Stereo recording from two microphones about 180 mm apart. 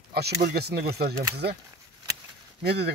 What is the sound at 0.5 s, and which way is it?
Speech, 60° right (ahead or behind).